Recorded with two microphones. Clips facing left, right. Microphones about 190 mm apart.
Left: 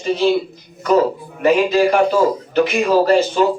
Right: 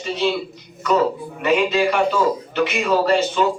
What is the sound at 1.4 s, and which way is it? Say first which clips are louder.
A man's voice: left 4 dB; 35° left (ahead or behind).